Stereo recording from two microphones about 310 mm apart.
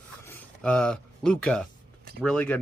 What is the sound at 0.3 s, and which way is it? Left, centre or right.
Speech, centre.